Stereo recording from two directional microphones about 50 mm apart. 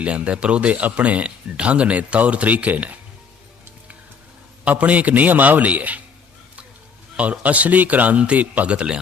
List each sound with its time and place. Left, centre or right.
0.0 s speech: right
4.6 s a man's voice: right
7.2 s a man's voice: right